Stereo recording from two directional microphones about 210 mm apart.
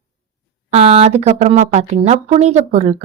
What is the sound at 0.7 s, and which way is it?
A woman's voice, 30° right (ahead or behind).